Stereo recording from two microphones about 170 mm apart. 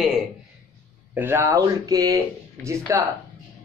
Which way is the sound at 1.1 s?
15° right (ahead or behind).